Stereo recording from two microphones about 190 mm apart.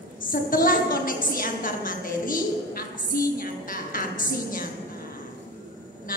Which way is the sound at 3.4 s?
45° left (ahead or behind).